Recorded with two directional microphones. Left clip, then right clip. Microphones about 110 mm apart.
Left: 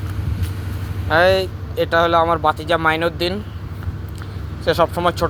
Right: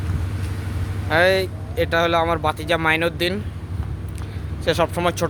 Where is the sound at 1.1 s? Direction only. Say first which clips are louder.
Left 3 dB; 10° right (ahead or behind).